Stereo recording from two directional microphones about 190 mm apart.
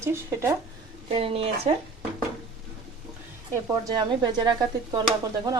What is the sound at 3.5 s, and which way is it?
Speech, 20° right (ahead or behind).